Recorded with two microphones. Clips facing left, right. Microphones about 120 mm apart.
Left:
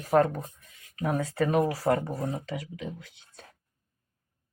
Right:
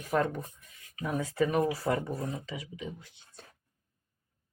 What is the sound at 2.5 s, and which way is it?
Speech, 70° left (ahead or behind).